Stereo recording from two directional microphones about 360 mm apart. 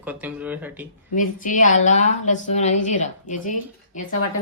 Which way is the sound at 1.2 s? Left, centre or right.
Left.